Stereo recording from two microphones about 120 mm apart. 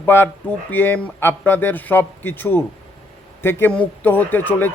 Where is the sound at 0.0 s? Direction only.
20° left (ahead or behind).